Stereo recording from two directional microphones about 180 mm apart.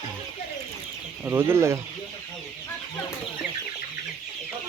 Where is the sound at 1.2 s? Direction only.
15° right (ahead or behind).